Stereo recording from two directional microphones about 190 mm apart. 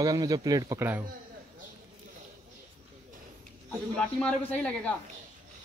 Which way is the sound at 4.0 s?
5° left (ahead or behind).